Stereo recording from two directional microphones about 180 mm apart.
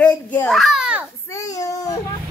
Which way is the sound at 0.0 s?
5° left (ahead or behind).